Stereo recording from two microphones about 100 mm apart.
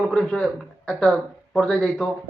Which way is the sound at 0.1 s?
10° left (ahead or behind).